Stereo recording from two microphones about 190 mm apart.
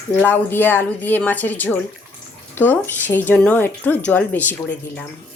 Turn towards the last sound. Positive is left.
turn(degrees=10)  # may be behind; listen again after turning